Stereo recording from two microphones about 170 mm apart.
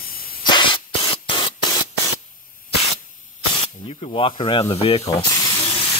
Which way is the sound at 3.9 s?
35° left (ahead or behind).